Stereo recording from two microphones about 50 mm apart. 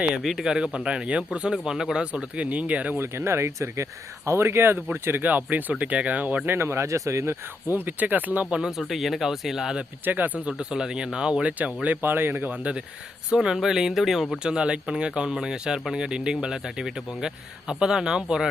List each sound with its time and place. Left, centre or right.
0.2 s speech: centre
0.5 s speech: centre
3.0 s speech: right
4.3 s speech: right
5.2 s speech: right
6.4 s speech: right
7.7 s speech: right
8.4 s speech: centre
8.9 s speech: centre
10.0 s speech: right
10.4 s speech: centre
12.0 s speech: right
12.5 s speech: right
13.3 s speech: centre